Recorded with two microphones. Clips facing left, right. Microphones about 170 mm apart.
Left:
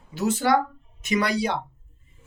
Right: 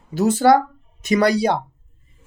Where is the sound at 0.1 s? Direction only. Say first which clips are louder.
Right 7 dB; 40° right (ahead or behind).